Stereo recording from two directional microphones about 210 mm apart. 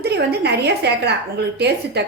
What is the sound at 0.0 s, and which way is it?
Speech, 50° right (ahead or behind).